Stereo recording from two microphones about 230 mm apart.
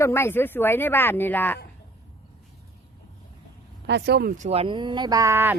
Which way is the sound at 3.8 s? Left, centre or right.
Right.